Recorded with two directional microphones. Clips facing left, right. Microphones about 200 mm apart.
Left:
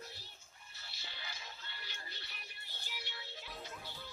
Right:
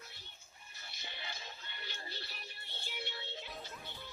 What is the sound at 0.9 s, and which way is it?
Music, 20° right (ahead or behind).